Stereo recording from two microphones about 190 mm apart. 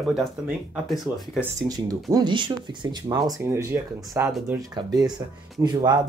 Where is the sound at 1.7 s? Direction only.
20° right (ahead or behind).